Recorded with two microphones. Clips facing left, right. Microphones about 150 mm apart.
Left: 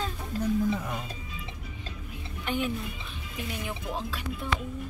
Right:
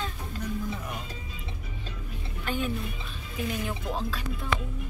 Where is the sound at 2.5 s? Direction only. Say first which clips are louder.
Left 1 dB; 20° left (ahead or behind).